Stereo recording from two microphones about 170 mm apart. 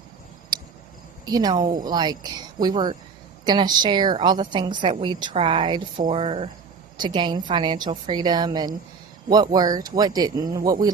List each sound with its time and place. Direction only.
1.2 s a woman's voice: 25° right (ahead or behind)